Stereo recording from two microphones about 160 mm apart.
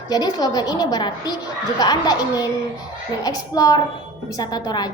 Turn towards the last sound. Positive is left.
turn(degrees=25)  # may be behind; listen again after turning